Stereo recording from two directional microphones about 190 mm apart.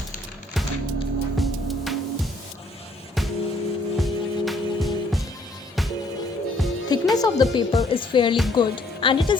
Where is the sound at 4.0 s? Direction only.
Centre (ahead or behind).